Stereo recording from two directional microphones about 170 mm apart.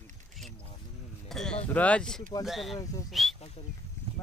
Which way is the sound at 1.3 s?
Centre (ahead or behind).